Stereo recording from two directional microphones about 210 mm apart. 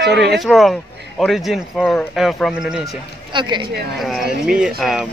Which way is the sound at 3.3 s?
20° right (ahead or behind).